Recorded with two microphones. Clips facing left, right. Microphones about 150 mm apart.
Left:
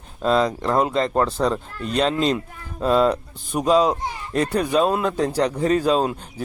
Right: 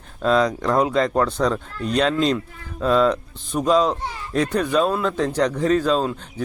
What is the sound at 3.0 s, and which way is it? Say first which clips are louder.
A man's voice: even; 10° left (ahead or behind).